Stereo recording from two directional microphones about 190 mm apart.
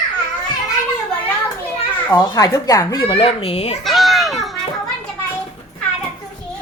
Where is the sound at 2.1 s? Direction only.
20° left (ahead or behind).